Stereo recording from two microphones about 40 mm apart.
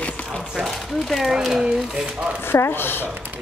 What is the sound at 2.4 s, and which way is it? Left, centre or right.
Speech, left.